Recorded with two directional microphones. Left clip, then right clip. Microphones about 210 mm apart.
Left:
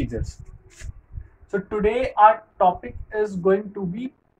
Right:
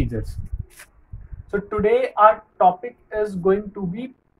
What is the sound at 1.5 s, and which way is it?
Speech, 25° right (ahead or behind).